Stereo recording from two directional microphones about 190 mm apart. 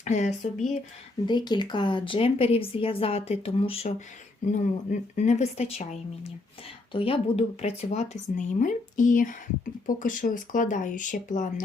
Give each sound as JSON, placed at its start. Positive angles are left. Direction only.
{"t": 0.0, "sound": "speech", "side_deg": 40}
{"t": 1.3, "sound": "speech", "side_deg": 25}